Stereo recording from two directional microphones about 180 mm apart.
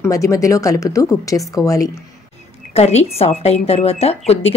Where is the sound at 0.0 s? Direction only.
15° left (ahead or behind).